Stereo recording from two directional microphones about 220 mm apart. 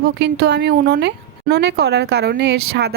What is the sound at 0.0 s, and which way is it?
Speech, 45° right (ahead or behind).